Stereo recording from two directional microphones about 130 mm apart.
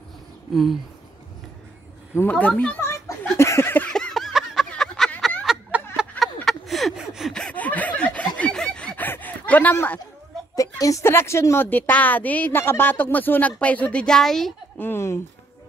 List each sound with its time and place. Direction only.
2.1 s a woman's voice: 10° left (ahead or behind)
3.3 s a sound: 20° left (ahead or behind)
10.5 s a woman's voice: 25° left (ahead or behind); by 14.5 s 5° left (ahead or behind)
14.8 s speech: 20° left (ahead or behind)